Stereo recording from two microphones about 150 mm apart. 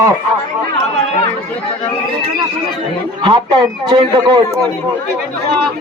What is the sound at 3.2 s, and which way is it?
A man's voice, 30° right (ahead or behind).